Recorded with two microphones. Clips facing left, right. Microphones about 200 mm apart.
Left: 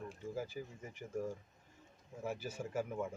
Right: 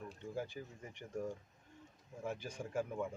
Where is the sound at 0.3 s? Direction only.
5° left (ahead or behind).